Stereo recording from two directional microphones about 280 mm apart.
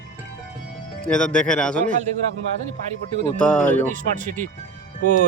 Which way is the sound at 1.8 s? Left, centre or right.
Right.